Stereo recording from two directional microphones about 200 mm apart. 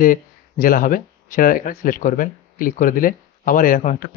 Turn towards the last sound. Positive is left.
turn(degrees=40)  # may be behind; listen again after turning